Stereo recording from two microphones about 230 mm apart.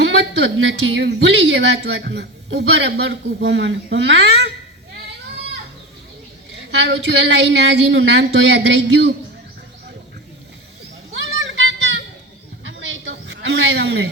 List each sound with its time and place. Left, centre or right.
0.2 s a woman's voice: right
6.7 s a woman's voice: right
11.1 s children playing: right
12.9 s a sound: right